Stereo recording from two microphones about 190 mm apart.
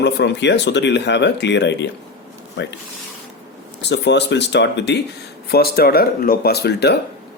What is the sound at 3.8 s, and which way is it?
Speech, 65° left (ahead or behind).